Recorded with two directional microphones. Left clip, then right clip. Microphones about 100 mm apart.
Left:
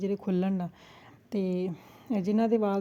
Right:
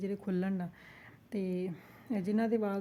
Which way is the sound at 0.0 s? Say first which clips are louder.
Left 6 dB; 40° left (ahead or behind).